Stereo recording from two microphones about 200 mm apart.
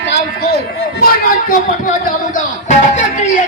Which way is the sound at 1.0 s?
45° left (ahead or behind).